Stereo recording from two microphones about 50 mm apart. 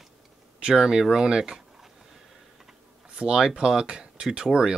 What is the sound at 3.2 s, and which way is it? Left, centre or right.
Speech, centre.